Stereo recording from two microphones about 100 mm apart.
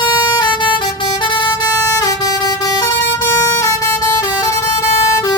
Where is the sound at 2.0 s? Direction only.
35° left (ahead or behind).